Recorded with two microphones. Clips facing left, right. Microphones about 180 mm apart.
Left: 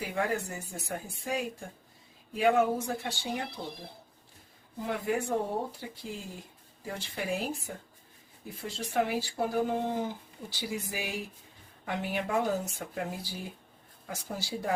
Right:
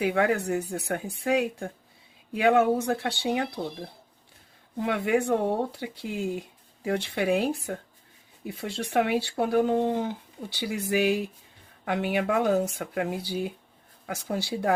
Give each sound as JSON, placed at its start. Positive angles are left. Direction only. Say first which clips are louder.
{"t": 0.0, "sound": "speech", "louder": "right 7 dB", "side_deg": -75}
{"t": 2.3, "sound": "speech", "louder": "right 4 dB", "side_deg": -75}
{"t": 4.8, "sound": "speech", "louder": "right 6 dB", "side_deg": -75}
{"t": 14.1, "sound": "speech", "louder": "right 7 dB", "side_deg": -70}